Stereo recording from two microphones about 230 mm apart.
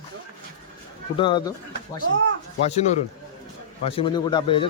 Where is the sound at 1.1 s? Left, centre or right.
Centre.